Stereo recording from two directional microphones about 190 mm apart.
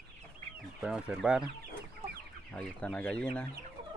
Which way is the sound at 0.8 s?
5° right (ahead or behind).